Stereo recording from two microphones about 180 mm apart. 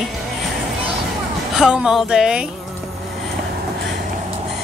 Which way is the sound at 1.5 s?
5° right (ahead or behind).